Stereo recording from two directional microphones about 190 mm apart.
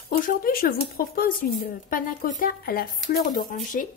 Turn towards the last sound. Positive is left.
turn(degrees=45)  # may be behind; listen again after turning